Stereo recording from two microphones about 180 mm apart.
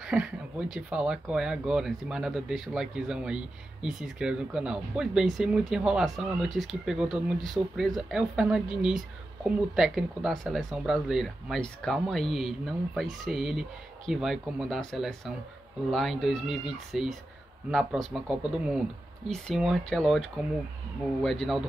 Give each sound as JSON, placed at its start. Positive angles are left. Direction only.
{"t": 0.0, "sound": "speech", "side_deg": -5}